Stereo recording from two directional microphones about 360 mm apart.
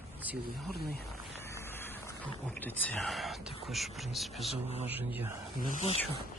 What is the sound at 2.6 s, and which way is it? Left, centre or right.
Speech, centre.